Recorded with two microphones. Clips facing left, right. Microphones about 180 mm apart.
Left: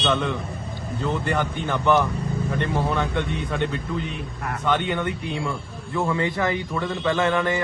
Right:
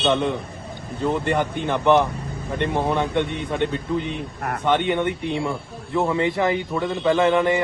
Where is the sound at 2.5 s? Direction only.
20° right (ahead or behind).